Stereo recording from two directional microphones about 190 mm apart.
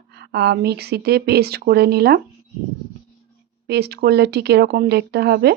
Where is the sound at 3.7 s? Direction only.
60° right (ahead or behind).